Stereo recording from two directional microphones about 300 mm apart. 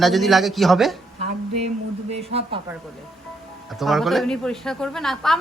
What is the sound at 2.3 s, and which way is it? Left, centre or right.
Speech, centre.